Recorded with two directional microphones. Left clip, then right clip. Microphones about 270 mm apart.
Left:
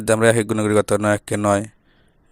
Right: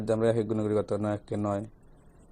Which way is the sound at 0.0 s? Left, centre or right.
Left.